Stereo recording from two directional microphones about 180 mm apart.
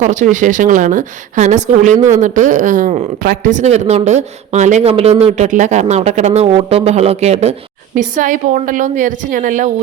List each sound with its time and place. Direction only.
0.0 s a woman's voice: 45° right (ahead or behind)